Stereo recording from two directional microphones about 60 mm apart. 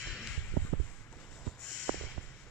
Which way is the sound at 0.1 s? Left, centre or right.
Centre.